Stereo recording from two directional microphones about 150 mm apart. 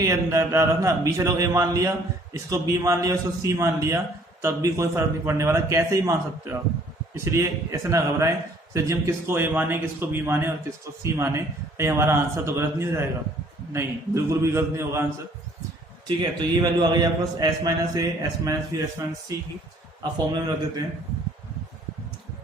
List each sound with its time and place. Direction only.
0.0 s a man's voice: 20° right (ahead or behind)
7.3 s a man's voice: 20° right (ahead or behind)
16.6 s a man's voice: 25° right (ahead or behind)